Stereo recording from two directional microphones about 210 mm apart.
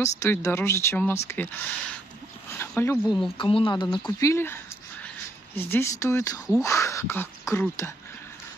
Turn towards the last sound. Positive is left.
turn(degrees=10)  # may be behind; listen again after turning